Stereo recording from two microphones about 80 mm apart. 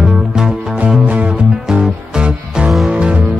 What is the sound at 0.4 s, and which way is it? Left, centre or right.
Music, centre.